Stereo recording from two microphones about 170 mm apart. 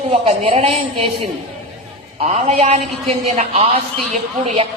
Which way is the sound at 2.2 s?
40° right (ahead or behind).